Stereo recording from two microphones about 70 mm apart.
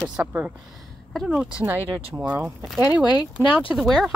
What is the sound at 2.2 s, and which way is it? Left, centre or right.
Speech, right.